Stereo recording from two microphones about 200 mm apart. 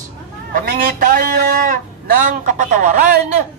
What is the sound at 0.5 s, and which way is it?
A man's voice, 45° right (ahead or behind).